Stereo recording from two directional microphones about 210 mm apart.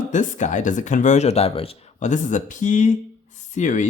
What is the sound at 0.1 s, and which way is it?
Speech, 35° left (ahead or behind).